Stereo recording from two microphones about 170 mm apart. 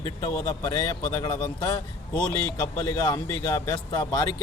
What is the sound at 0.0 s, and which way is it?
Speech, 20° left (ahead or behind).